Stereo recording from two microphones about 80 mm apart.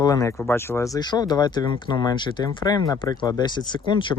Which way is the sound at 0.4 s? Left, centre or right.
Left.